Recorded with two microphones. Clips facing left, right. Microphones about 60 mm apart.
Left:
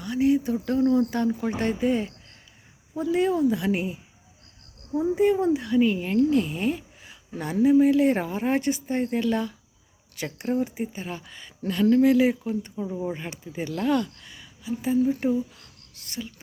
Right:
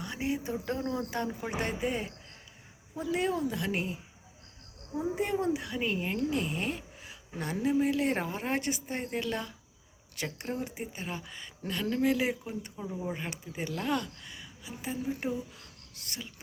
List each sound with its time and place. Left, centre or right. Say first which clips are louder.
0.0 s a woman's voice: left 11 dB; right; by 3.9 s centre
4.9 s a woman's voice: left 9 dB; centre
12.7 s a woman's voice: left 6 dB; centre